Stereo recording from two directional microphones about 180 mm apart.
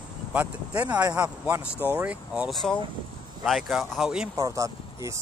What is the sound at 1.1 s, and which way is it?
Speech, 5° right (ahead or behind).